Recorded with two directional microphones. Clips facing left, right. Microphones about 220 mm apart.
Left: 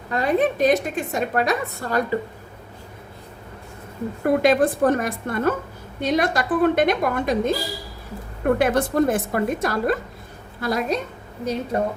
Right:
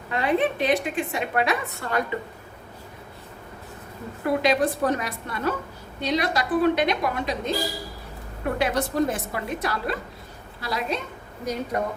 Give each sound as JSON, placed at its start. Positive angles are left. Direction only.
{"t": 0.1, "sound": "a woman's voice", "side_deg": 40}
{"t": 4.2, "sound": "a woman's voice", "side_deg": 50}
{"t": 8.5, "sound": "a woman's voice", "side_deg": 50}
{"t": 11.7, "sound": "a woman's voice", "side_deg": 30}